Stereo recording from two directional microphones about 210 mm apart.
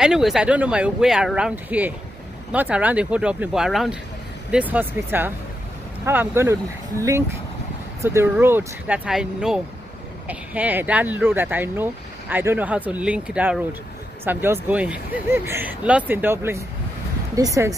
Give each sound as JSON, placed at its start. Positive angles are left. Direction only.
{"t": 0.0, "sound": "speech", "side_deg": 0}